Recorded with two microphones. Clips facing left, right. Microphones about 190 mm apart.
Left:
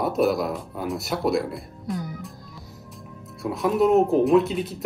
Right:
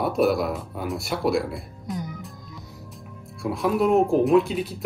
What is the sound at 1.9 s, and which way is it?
Music, 20° right (ahead or behind).